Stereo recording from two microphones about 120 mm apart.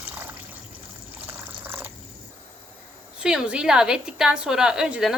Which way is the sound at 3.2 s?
5° right (ahead or behind).